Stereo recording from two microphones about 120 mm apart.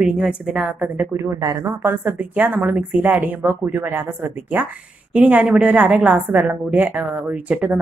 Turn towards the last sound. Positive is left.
turn(degrees=-10)  # may be behind; listen again after turning